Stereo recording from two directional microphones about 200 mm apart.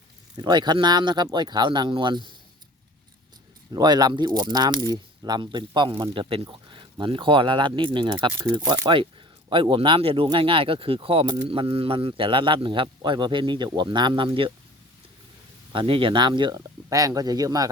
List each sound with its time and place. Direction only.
0.3 s speech: 20° right (ahead or behind)
3.7 s speech: 20° right (ahead or behind)
15.7 s speech: 25° right (ahead or behind)